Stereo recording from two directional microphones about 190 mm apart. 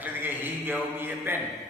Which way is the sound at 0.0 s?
10° right (ahead or behind).